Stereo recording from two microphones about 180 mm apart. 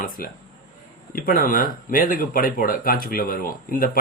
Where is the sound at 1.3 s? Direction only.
50° left (ahead or behind).